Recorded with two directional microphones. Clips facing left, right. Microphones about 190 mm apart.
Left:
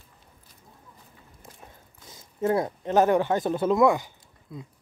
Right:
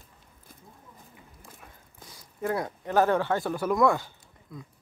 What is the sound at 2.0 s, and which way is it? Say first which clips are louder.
Speech: left 5 dB; 25° left (ahead or behind).